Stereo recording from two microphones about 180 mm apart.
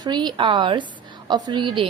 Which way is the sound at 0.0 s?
25° right (ahead or behind).